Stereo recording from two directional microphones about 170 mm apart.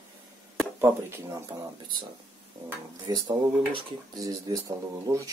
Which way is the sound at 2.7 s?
20° right (ahead or behind).